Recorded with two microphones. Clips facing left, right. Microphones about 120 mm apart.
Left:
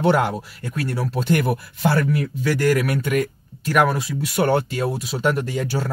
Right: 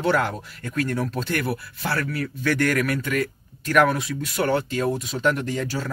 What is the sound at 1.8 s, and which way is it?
Speech, 25° left (ahead or behind).